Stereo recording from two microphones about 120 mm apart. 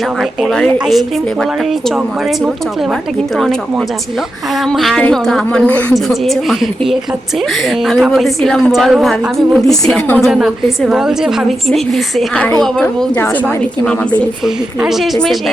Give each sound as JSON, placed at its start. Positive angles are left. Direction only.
{"t": 0.2, "sound": "a woman's voice", "side_deg": 0}
{"t": 3.3, "sound": "a woman's voice", "side_deg": 5}
{"t": 5.9, "sound": "a woman's voice", "side_deg": 0}
{"t": 14.4, "sound": "a woman's voice", "side_deg": -5}